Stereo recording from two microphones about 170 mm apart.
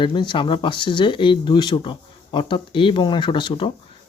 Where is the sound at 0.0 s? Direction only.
30° left (ahead or behind).